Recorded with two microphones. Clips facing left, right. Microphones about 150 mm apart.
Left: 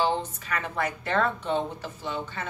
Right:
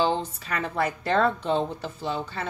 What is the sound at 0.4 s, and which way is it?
Speech, 35° right (ahead or behind).